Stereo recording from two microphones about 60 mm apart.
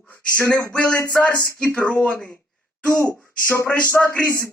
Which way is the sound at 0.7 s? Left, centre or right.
Centre.